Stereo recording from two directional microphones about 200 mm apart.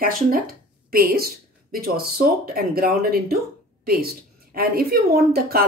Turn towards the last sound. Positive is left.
turn(degrees=-50)  # may be behind; listen again after turning